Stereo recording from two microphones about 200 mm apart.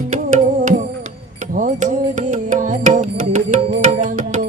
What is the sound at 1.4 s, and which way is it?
Music, 40° right (ahead or behind).